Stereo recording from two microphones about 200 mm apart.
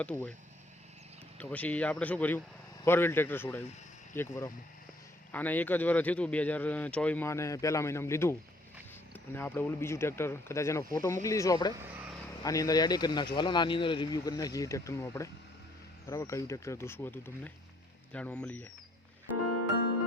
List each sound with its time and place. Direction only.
0.0 s speech: 5° left (ahead or behind)
1.4 s speech: 5° left (ahead or behind)